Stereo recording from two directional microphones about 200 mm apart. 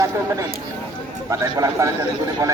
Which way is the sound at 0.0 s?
15° right (ahead or behind).